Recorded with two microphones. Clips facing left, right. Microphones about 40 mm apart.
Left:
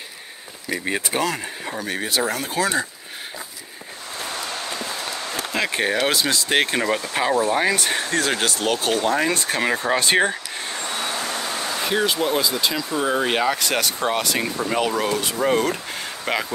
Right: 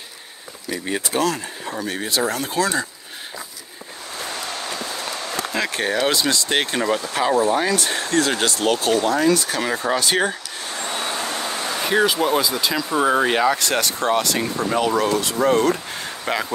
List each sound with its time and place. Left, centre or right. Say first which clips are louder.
0.7 s speech: left 1 dB; centre
5.5 s speech: left 1 dB; centre
9.3 s speech: right 1 dB; left
10.9 s vehicle: right 2 dB; centre
12.1 s speech: right 2 dB; centre
12.9 s speech: right 5 dB; centre
13.3 s speech: right 2 dB; centre